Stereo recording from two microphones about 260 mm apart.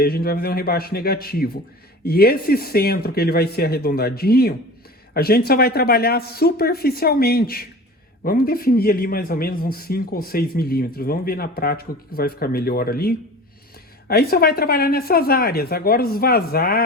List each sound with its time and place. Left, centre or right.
0.0 s speech: left